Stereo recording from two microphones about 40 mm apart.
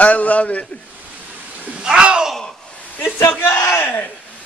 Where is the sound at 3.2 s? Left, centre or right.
Left.